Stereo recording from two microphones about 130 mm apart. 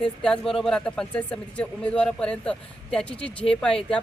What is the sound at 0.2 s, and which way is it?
Speech, 5° left (ahead or behind).